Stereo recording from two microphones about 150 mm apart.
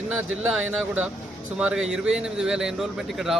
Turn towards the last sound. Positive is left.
turn(degrees=0)  # may be behind; listen again after turning